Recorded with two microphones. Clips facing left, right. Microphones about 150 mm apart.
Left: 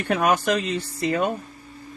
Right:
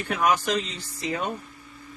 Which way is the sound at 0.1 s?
60° left (ahead or behind).